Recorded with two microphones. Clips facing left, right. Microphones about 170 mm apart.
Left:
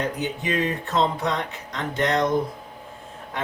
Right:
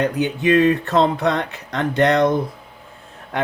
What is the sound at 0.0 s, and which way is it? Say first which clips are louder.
Speech: right 8 dB; 65° right (ahead or behind).